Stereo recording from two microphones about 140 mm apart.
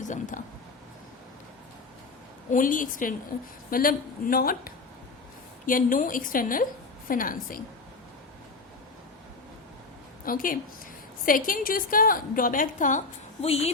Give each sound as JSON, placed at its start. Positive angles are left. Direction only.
{"t": 0.0, "sound": "speech", "side_deg": 65}
{"t": 2.5, "sound": "a woman's voice", "side_deg": 70}
{"t": 3.7, "sound": "speech", "side_deg": 90}
{"t": 5.6, "sound": "a woman's voice", "side_deg": 75}
{"t": 10.2, "sound": "a woman's voice", "side_deg": 85}
{"t": 13.4, "sound": "a woman's voice", "side_deg": 45}